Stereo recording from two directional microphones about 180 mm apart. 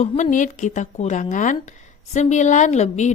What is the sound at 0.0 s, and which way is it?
Speech, 45° left (ahead or behind).